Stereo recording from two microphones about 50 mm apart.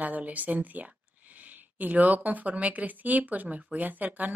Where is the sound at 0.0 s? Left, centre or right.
Right.